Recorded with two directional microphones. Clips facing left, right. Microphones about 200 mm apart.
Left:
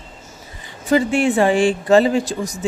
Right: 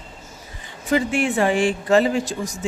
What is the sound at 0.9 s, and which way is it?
A woman's voice, 30° left (ahead or behind).